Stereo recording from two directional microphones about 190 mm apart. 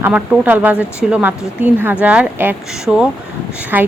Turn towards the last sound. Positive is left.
turn(degrees=-10)  # may be behind; listen again after turning